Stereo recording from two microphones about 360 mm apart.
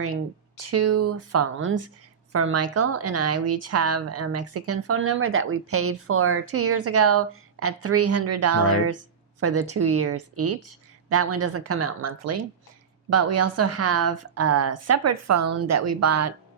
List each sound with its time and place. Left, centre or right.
0.5 s speech: right